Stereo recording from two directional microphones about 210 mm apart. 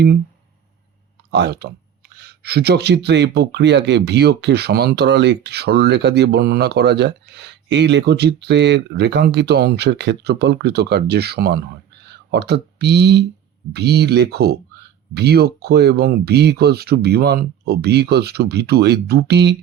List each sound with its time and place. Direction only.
1.3 s speech: 50° right (ahead or behind)